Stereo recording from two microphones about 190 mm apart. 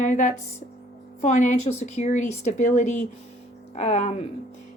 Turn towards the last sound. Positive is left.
turn(degrees=35)  # may be behind; listen again after turning